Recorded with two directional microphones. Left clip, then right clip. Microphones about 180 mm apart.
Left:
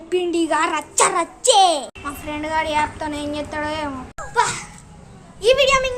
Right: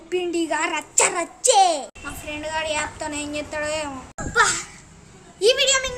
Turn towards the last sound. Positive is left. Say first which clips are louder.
# left 4 dB
turn(degrees=-15)  # may be behind; listen again after turning